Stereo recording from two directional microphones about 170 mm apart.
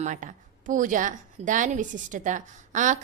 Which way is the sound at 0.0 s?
45° right (ahead or behind).